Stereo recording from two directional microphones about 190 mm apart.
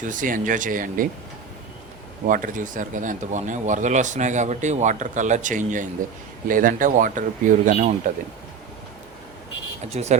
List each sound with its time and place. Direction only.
0.0 s speech: 45° right (ahead or behind)
2.2 s speech: 45° right (ahead or behind)
9.9 s speech: 35° right (ahead or behind)